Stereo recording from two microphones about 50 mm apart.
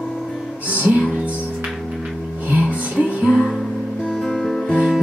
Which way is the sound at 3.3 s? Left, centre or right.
Left.